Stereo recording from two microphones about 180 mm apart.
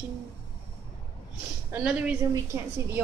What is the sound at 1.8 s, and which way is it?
Speech, 5° right (ahead or behind).